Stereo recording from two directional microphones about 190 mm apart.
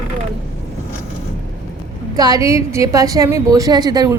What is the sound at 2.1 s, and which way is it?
A woman's voice, 20° right (ahead or behind).